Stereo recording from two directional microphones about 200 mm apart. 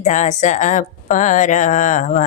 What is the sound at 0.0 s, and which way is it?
Speech, 35° left (ahead or behind).